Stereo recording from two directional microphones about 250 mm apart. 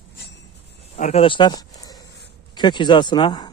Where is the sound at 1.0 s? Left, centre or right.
Left.